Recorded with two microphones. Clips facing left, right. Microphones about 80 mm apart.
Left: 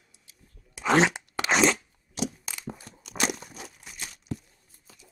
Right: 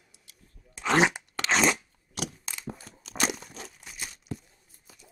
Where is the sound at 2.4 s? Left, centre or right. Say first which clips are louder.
Even; centre.